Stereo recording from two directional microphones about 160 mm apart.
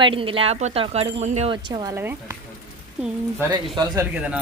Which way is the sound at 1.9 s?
15° right (ahead or behind).